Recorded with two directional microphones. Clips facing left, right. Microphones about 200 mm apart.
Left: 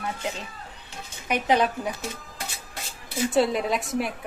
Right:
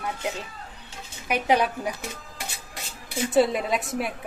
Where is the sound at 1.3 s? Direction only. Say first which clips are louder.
Even; 10° right (ahead or behind).